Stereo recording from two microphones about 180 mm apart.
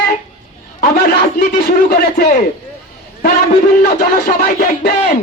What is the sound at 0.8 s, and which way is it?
Speech, 60° left (ahead or behind).